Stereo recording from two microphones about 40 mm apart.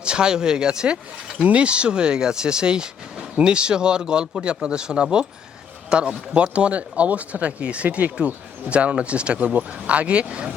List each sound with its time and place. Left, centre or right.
0.0 s speech: right